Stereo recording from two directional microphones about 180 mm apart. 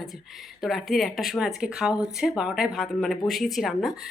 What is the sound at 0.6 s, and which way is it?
A woman's voice, centre (ahead or behind).